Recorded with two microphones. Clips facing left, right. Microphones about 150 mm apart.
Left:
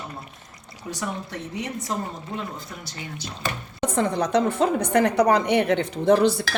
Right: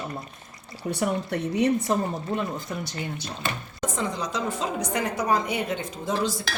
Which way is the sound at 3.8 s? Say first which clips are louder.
Left 6 dB; 60° left (ahead or behind).